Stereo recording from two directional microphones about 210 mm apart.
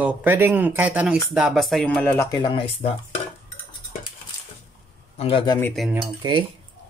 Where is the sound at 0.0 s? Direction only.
10° right (ahead or behind); by 2.2 s 5° left (ahead or behind).